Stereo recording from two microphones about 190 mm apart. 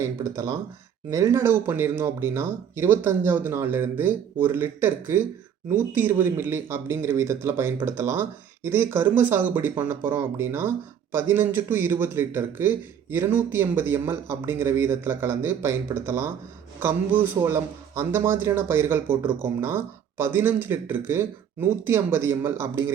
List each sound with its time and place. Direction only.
0.0 s a man's voice: 15° right (ahead or behind)